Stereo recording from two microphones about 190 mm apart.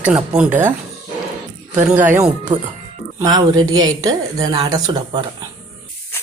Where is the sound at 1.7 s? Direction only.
10° right (ahead or behind).